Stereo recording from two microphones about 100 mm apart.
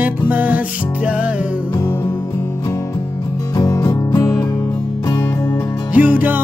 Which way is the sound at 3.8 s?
30° left (ahead or behind).